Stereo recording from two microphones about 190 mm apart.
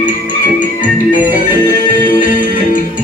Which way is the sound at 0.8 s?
45° left (ahead or behind).